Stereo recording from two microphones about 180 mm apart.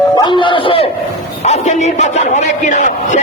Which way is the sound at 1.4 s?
40° left (ahead or behind).